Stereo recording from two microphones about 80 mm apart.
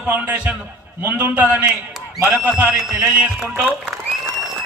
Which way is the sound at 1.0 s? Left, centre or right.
Right.